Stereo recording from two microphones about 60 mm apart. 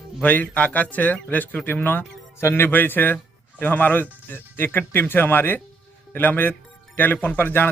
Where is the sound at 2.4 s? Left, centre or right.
Left.